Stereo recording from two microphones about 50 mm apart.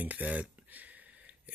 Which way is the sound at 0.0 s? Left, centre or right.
Right.